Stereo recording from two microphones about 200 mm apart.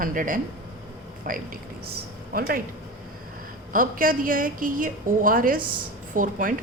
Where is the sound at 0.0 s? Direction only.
40° right (ahead or behind).